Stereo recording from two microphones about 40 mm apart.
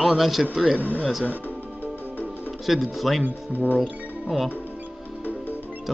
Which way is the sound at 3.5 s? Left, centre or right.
Left.